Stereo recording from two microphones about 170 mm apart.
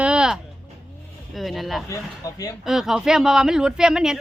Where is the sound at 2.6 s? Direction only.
5° right (ahead or behind).